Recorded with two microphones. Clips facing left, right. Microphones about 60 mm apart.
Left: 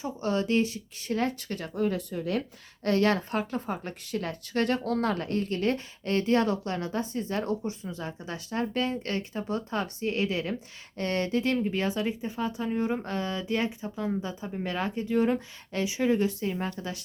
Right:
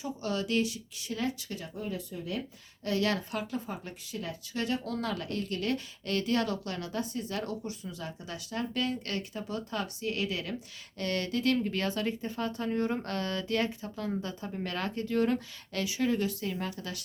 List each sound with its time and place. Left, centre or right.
0.0 s speech: left
2.8 s speech: left
11.5 s speech: centre; by 17.0 s left